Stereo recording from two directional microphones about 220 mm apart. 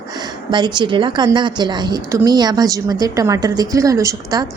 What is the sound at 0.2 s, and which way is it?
A woman's voice, 20° right (ahead or behind).